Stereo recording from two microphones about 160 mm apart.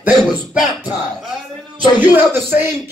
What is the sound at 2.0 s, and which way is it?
Speech, 10° right (ahead or behind).